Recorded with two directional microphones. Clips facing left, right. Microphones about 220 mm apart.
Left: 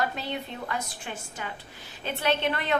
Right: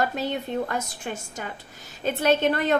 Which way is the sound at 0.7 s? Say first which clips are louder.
Right 4 dB; 45° right (ahead or behind).